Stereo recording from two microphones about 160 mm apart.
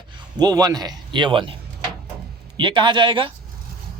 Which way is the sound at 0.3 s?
25° right (ahead or behind).